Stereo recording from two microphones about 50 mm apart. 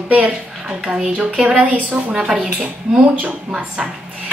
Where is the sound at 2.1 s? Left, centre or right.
Centre.